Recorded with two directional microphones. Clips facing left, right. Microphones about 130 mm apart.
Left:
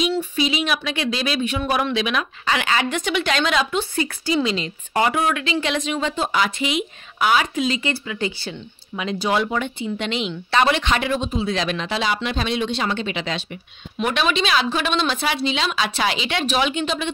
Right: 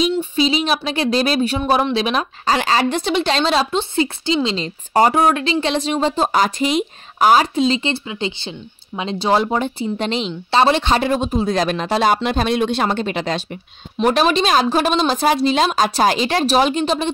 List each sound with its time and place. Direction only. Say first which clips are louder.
0.1 s speech: right 4 dB; 30° right (ahead or behind)